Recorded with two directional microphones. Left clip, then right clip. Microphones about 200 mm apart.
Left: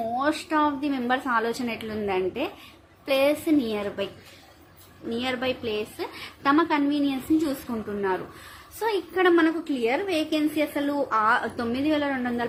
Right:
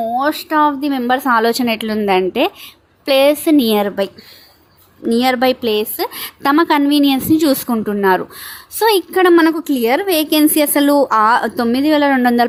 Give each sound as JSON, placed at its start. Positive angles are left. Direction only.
{"t": 0.2, "sound": "a woman's voice", "side_deg": -35}